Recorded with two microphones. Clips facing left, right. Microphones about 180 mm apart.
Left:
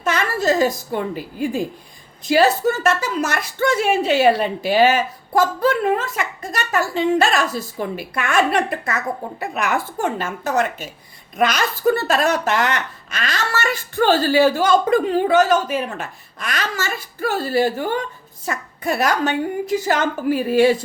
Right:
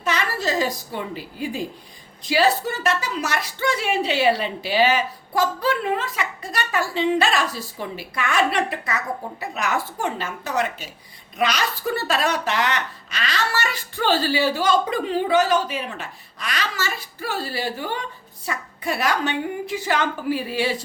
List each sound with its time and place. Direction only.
0.0 s a woman's voice: 50° left (ahead or behind)